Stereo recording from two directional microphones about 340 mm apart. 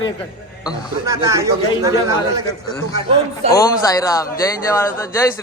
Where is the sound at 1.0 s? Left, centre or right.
Centre.